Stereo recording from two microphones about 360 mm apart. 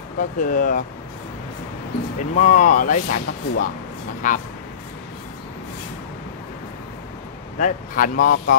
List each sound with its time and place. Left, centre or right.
0.2 s speech: left
2.3 s speech: left
7.5 s speech: left